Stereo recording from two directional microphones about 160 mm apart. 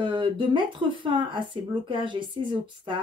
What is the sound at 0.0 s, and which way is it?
Speech, 30° right (ahead or behind).